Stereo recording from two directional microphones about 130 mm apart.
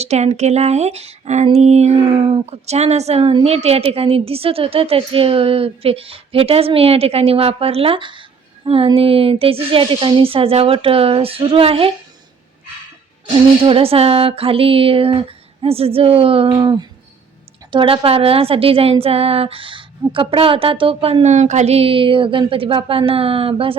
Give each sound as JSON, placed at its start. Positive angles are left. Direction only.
{"t": 0.0, "sound": "a woman's voice", "side_deg": -55}
{"t": 13.2, "sound": "a woman's voice", "side_deg": -45}